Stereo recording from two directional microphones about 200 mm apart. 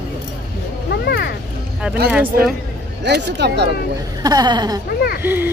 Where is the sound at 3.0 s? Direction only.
60° right (ahead or behind).